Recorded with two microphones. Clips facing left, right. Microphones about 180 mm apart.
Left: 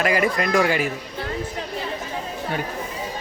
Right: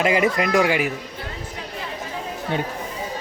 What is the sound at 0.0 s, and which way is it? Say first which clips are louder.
Speech: right 1 dB; 20° right (ahead or behind).